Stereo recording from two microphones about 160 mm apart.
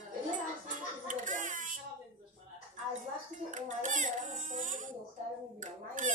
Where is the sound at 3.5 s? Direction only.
50° right (ahead or behind).